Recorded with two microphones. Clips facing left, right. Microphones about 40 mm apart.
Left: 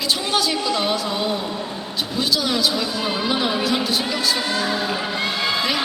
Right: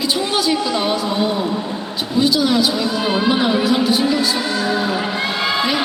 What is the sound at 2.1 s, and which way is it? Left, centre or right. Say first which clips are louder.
A woman's voice: right 7 dB; centre.